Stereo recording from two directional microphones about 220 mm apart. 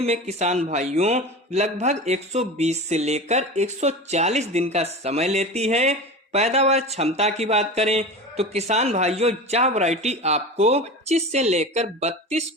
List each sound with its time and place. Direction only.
0.0 s a man's voice: 30° right (ahead or behind)